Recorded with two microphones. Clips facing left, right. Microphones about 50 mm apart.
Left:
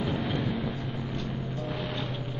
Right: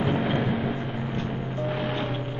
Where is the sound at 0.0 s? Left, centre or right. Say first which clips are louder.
Right 5 dB; right.